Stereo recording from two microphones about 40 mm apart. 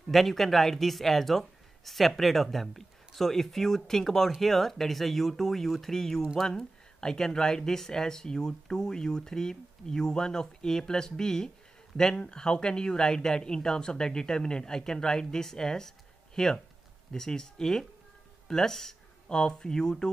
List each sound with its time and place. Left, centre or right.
0.1 s speech: centre